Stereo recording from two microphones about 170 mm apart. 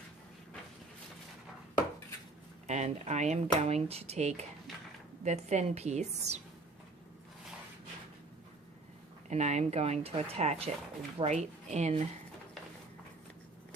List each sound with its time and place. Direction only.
2.6 s speech: 40° right (ahead or behind)
9.3 s speech: 40° right (ahead or behind)